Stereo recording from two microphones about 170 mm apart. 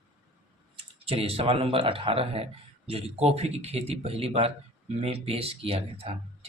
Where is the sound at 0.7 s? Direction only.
35° right (ahead or behind).